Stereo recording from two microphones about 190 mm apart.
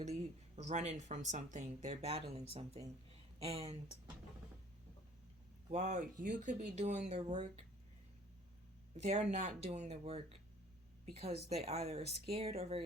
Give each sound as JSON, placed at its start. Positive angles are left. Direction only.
{"t": 0.0, "sound": "speech", "side_deg": -35}
{"t": 5.7, "sound": "speech", "side_deg": -40}
{"t": 9.3, "sound": "a woman's voice", "side_deg": -40}